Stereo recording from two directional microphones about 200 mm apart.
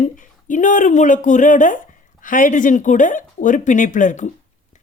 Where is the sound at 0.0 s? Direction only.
40° left (ahead or behind).